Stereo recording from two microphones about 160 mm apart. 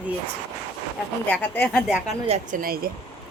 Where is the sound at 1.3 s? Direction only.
10° left (ahead or behind).